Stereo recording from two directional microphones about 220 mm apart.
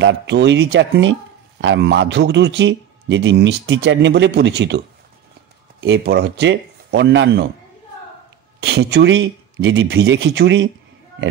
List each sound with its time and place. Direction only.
0.0 s a man's voice: 55° right (ahead or behind)
8.5 s a man's voice: 50° right (ahead or behind)